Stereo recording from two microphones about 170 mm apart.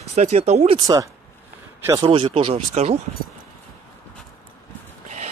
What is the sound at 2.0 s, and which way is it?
Speech, 30° right (ahead or behind).